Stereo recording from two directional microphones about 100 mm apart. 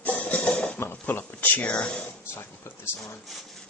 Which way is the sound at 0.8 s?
20° left (ahead or behind).